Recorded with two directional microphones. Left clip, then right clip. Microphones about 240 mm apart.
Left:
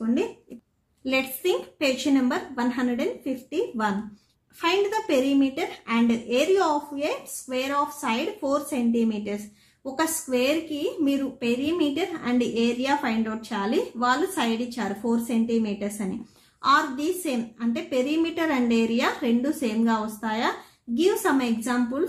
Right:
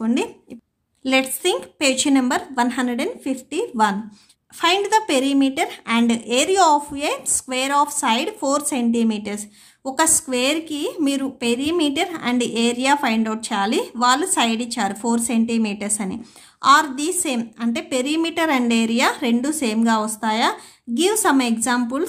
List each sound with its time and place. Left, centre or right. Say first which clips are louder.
1.0 s a woman's voice: right 6 dB; right